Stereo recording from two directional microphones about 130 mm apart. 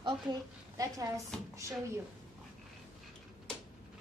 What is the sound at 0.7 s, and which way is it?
Speech, 25° right (ahead or behind).